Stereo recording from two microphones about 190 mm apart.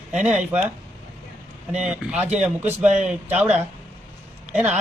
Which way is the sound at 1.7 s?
5° right (ahead or behind).